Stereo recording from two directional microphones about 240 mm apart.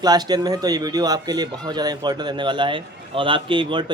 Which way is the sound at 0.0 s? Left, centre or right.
Centre.